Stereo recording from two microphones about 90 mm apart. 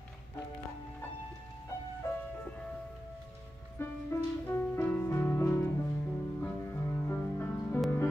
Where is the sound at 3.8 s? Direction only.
25° left (ahead or behind).